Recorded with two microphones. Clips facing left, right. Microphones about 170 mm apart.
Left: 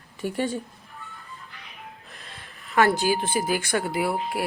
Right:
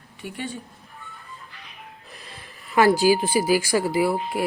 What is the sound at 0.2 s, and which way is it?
Speech, 40° left (ahead or behind).